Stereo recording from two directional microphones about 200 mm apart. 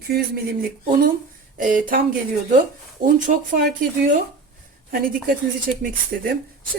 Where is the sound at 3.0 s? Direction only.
45° right (ahead or behind).